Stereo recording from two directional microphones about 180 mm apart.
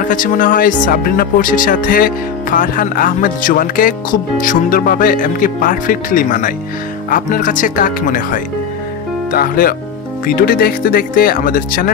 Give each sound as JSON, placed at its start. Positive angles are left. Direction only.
{"t": 0.1, "sound": "speech", "side_deg": 50}